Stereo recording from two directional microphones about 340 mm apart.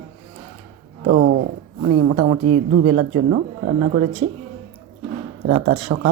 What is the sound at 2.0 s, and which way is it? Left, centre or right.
Speech, right.